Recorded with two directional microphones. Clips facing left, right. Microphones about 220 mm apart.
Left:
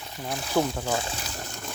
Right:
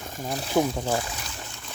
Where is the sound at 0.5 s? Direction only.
20° right (ahead or behind).